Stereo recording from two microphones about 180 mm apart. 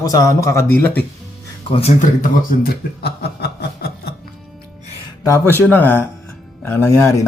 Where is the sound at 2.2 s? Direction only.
55° left (ahead or behind).